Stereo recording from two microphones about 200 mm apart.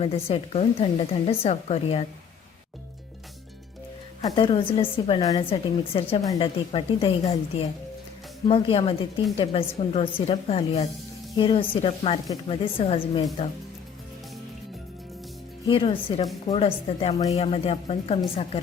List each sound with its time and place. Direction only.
0.0 s a woman's voice: 30° left (ahead or behind)
4.3 s a woman's voice: 25° left (ahead or behind)
15.6 s a woman's voice: 25° left (ahead or behind)